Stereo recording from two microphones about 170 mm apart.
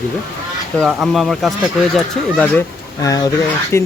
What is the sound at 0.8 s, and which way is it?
Speech, centre (ahead or behind).